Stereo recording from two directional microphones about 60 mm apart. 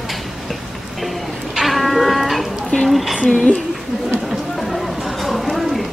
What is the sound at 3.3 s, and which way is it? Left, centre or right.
Speech, centre.